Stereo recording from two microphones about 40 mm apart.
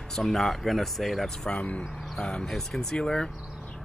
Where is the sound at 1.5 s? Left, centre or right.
Left.